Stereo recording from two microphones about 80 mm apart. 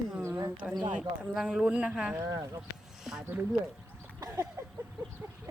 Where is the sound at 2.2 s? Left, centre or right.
Right.